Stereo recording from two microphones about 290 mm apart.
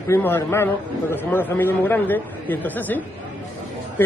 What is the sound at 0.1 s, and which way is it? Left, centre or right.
Speech, centre.